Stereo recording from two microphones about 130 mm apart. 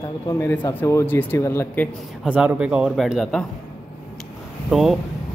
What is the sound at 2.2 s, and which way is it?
Speech, 10° right (ahead or behind).